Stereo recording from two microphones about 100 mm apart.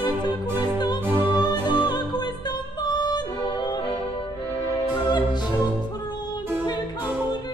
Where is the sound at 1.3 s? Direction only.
45° left (ahead or behind).